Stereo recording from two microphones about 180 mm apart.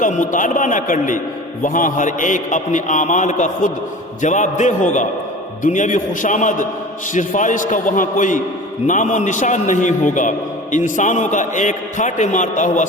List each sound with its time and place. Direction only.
0.0 s a man's voice: 45° left (ahead or behind)